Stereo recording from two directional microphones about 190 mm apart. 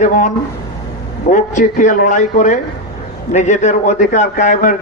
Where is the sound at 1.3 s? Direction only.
40° left (ahead or behind).